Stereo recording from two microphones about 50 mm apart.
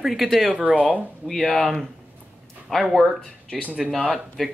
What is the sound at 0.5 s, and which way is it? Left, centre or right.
Speech, right.